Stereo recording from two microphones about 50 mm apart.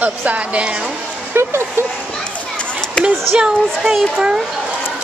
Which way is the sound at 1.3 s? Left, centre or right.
Right.